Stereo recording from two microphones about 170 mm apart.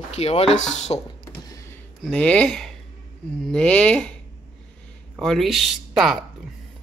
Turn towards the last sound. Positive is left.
turn(degrees=0)  # may be behind; listen again after turning